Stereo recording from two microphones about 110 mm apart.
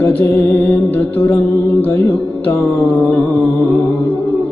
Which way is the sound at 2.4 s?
20° left (ahead or behind).